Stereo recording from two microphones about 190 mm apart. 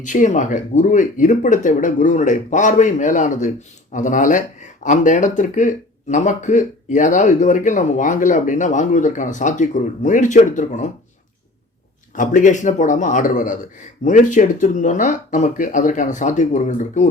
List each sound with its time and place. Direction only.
0.0 s speech: 40° left (ahead or behind)
12.1 s speech: 40° left (ahead or behind)